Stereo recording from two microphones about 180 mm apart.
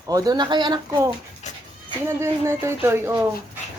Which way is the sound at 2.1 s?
15° right (ahead or behind).